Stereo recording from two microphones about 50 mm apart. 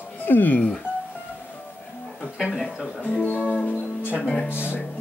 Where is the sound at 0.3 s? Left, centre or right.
Left.